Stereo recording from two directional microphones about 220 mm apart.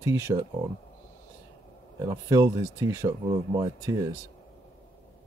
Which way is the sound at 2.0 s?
15° right (ahead or behind).